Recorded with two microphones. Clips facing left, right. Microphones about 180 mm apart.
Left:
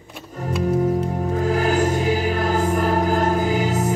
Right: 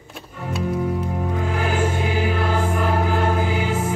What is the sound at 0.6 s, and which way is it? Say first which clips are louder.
Music: left 4 dB; 40° left (ahead or behind).